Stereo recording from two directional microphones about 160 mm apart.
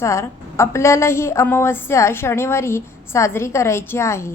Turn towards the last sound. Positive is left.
turn(degrees=15)  # may be behind; listen again after turning